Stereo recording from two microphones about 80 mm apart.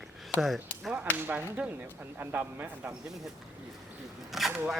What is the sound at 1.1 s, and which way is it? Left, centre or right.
Speech, right.